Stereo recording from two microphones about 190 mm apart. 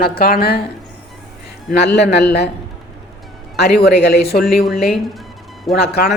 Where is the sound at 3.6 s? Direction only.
60° left (ahead or behind).